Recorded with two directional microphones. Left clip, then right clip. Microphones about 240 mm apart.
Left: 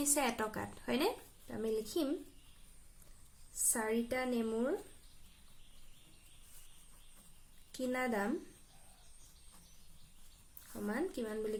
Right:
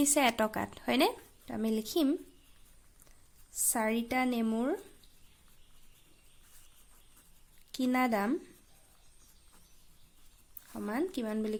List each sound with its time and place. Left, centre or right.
0.0 s a woman's voice: right
3.7 s a woman's voice: right
7.7 s a woman's voice: right
10.8 s speech: right